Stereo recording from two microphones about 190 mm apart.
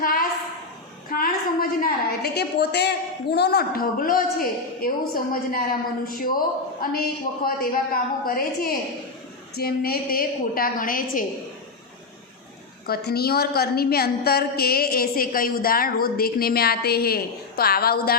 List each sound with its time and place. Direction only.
0.0 s a sound: 50° left (ahead or behind)
1.1 s a woman's voice: 50° left (ahead or behind)
7.4 s a woman's voice: 50° left (ahead or behind)
12.9 s a woman's voice: 55° left (ahead or behind)